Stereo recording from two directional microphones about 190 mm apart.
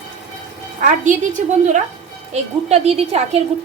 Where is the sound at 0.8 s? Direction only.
40° right (ahead or behind).